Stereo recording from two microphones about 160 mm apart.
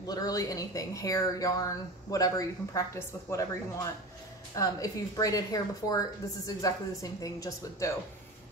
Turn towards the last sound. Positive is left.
turn(degrees=20)  # may be behind; listen again after turning